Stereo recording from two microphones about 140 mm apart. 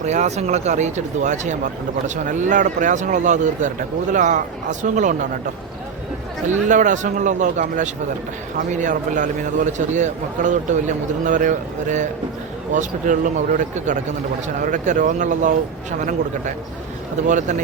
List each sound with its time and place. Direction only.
0.0 s a man's voice: 55° right (ahead or behind)
6.5 s a man's voice: 65° right (ahead or behind)
17.2 s a man's voice: 60° right (ahead or behind)